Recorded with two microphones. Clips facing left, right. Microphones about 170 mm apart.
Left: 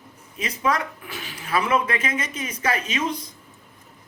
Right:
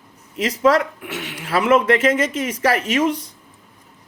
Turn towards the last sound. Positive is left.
turn(degrees=-80)